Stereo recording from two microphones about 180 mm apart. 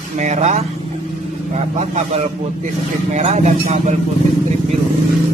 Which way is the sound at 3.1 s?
40° right (ahead or behind).